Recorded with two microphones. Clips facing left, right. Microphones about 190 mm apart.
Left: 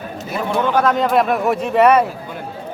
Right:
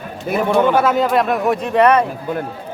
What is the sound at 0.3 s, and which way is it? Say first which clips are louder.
Speech: right 5 dB; 55° right (ahead or behind).